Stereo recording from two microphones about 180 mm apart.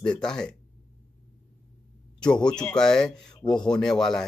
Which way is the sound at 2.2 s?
5° left (ahead or behind).